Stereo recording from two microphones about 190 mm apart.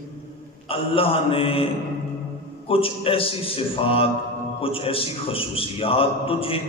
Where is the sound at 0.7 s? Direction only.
30° left (ahead or behind).